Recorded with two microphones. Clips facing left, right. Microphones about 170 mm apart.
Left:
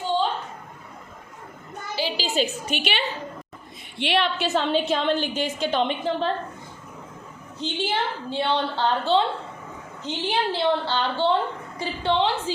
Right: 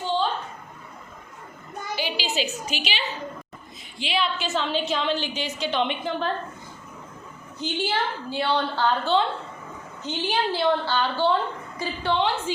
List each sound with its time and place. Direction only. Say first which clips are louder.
2.0 s a child's voice: left 3 dB; 35° left (ahead or behind)
2.6 s a woman's voice: left 3 dB; 55° left (ahead or behind)
4.4 s a woman's voice: left 3 dB; centre (ahead or behind)
4.7 s a woman's voice: left 3 dB; 50° left (ahead or behind); by 6.3 s 30° left (ahead or behind)
7.6 s a woman's voice: even; 25° left (ahead or behind)